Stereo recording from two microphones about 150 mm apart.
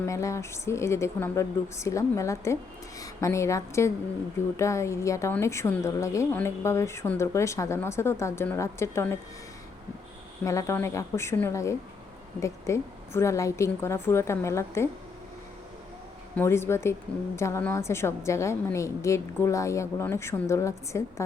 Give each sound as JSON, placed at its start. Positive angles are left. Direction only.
{"t": 0.0, "sound": "a woman's voice", "side_deg": 20}
{"t": 10.4, "sound": "a woman's voice", "side_deg": 20}
{"t": 16.3, "sound": "a woman's voice", "side_deg": 15}